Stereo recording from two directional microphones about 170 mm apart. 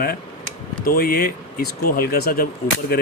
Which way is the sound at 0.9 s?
65° left (ahead or behind).